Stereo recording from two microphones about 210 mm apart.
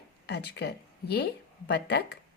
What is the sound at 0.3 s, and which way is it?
Speech, 50° left (ahead or behind).